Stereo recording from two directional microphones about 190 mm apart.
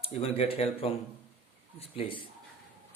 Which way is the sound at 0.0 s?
30° left (ahead or behind).